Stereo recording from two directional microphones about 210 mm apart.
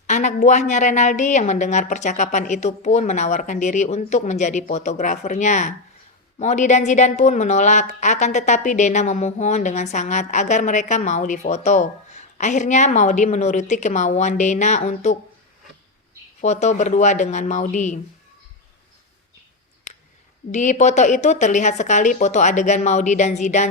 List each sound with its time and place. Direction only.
0.1 s a woman's voice: 35° left (ahead or behind)
16.4 s a woman's voice: 35° left (ahead or behind)
20.5 s a woman's voice: 35° left (ahead or behind)